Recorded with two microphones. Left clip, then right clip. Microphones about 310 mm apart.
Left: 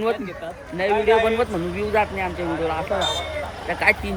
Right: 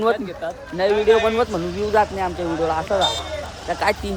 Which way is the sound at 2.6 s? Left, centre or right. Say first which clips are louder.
Right 4 dB; centre.